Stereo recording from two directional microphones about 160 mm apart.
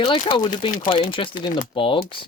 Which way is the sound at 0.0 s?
30° left (ahead or behind).